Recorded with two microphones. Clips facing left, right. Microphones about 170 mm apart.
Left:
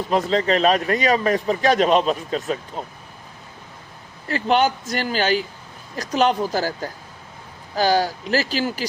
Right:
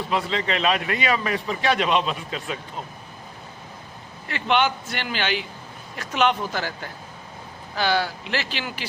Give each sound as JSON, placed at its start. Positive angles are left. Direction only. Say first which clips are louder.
{"t": 0.1, "sound": "a man's voice", "louder": "left 7 dB", "side_deg": 40}
{"t": 4.3, "sound": "a man's voice", "louder": "left 3 dB", "side_deg": 40}